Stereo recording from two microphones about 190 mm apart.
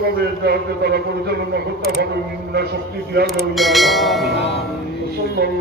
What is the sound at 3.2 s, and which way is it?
Speech, centre (ahead or behind).